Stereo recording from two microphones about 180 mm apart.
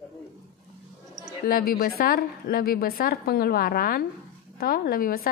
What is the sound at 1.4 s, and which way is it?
A woman's voice, 55° left (ahead or behind).